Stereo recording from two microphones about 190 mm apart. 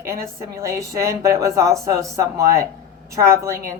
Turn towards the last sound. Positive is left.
turn(degrees=-15)  # may be behind; listen again after turning